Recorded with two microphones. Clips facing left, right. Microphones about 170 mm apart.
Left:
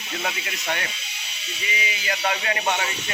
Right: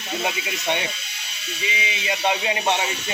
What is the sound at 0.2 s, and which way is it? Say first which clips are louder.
Speech: right 2 dB; 20° right (ahead or behind).